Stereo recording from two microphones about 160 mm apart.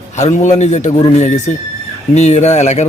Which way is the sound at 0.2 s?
45° left (ahead or behind).